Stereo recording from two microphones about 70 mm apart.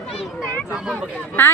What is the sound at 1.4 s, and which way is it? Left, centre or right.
Speech, left.